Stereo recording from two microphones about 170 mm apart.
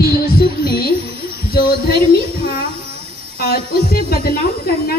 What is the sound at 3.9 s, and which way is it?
Speech, 65° left (ahead or behind).